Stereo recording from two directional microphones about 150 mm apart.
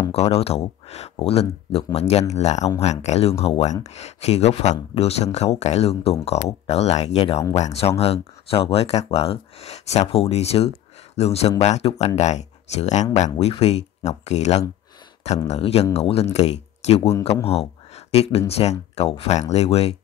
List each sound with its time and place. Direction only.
0.1 s speech: 40° left (ahead or behind)
17.5 s a sound: 45° left (ahead or behind)
18.5 s speech: 45° left (ahead or behind)